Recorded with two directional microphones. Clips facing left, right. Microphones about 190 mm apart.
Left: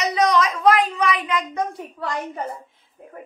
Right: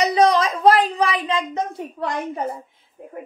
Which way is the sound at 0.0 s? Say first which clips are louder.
Right 3 dB; 30° right (ahead or behind).